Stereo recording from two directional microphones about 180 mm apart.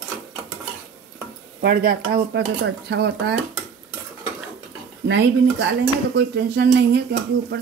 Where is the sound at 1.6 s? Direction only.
60° right (ahead or behind).